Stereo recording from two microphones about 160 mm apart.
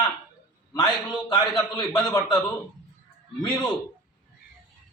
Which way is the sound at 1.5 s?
Centre (ahead or behind).